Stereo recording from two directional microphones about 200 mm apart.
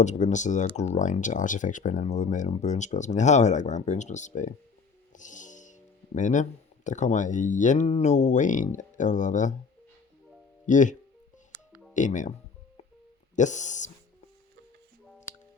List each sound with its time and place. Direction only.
0.0 s speech: 35° left (ahead or behind)
5.1 s music: 40° left (ahead or behind)
6.1 s speech: 40° left (ahead or behind)
10.7 s speech: 40° left (ahead or behind)
11.9 s speech: 40° left (ahead or behind)
13.3 s speech: 35° left (ahead or behind)